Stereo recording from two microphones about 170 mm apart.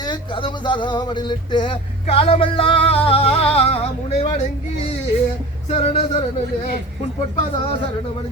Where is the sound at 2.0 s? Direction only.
35° left (ahead or behind).